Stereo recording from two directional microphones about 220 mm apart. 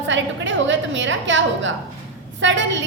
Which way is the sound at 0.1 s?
55° right (ahead or behind).